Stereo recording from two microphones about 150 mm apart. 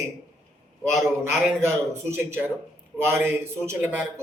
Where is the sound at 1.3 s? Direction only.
15° right (ahead or behind).